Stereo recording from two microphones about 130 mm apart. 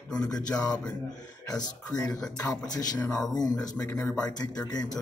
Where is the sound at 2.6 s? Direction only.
30° left (ahead or behind).